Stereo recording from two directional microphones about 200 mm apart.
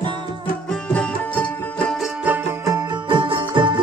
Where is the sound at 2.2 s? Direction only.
10° right (ahead or behind).